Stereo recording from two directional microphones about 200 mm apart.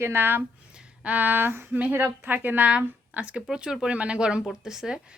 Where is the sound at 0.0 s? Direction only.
10° right (ahead or behind).